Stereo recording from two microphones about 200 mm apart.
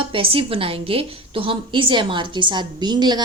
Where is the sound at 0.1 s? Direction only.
25° right (ahead or behind).